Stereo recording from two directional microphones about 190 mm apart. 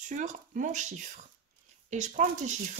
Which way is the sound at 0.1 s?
40° right (ahead or behind).